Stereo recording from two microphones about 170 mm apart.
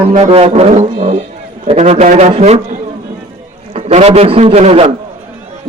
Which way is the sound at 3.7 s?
40° right (ahead or behind).